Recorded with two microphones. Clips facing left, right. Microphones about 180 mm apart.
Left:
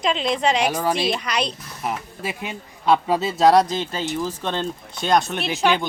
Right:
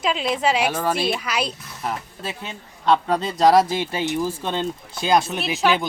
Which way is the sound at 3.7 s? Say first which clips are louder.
Right 2 dB; 10° right (ahead or behind).